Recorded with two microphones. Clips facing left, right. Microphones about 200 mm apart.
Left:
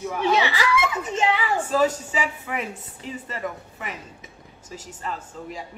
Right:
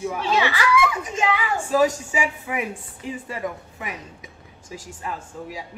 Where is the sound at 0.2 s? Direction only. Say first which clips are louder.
Left 2 dB; 15° left (ahead or behind).